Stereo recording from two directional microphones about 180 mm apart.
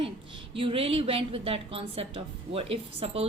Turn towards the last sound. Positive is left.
turn(degrees=-35)  # may be behind; listen again after turning